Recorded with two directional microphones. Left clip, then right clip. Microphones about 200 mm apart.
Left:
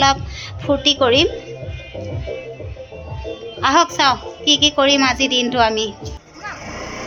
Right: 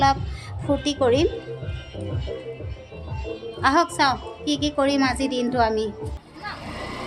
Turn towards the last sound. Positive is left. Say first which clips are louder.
# left 5 dB
turn(degrees=0)  # may be behind; listen again after turning